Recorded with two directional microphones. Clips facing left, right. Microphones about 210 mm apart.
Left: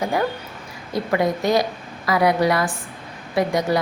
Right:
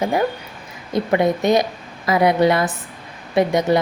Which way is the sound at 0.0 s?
20° right (ahead or behind).